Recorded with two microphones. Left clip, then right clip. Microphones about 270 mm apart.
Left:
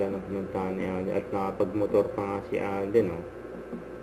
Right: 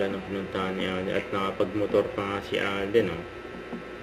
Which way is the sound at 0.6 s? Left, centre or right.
Centre.